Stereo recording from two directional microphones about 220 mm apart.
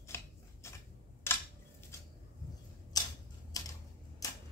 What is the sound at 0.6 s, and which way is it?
Scissors, 10° left (ahead or behind).